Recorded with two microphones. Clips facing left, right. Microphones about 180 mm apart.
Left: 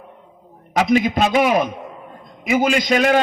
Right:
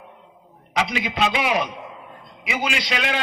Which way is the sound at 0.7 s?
45° left (ahead or behind).